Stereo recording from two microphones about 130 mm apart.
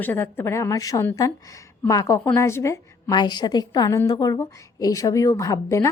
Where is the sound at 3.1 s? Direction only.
35° left (ahead or behind).